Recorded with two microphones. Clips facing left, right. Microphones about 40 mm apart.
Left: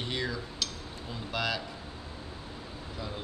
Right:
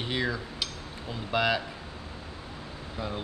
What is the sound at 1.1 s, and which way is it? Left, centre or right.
Speech, centre.